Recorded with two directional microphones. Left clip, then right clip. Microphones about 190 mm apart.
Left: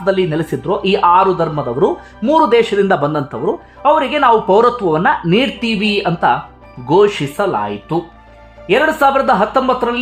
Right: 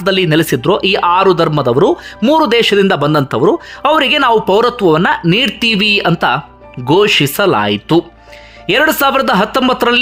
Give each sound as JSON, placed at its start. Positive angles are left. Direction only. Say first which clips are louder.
{"t": 0.0, "sound": "speech", "louder": "right 3 dB", "side_deg": -20}